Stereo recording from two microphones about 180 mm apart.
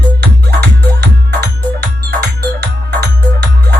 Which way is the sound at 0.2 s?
65° right (ahead or behind).